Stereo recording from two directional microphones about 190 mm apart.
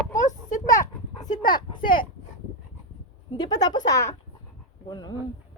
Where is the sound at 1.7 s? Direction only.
45° left (ahead or behind).